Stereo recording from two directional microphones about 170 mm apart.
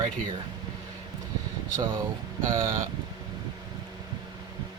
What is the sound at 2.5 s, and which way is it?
Speech, 30° right (ahead or behind).